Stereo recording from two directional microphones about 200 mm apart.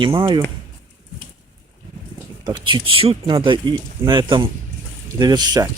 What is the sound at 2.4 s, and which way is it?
Speech, 25° right (ahead or behind).